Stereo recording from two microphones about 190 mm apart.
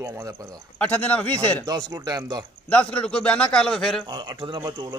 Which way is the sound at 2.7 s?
5° left (ahead or behind).